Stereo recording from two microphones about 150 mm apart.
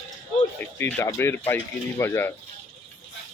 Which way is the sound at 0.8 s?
15° left (ahead or behind).